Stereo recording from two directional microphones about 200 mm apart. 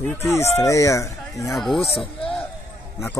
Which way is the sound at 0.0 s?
10° left (ahead or behind).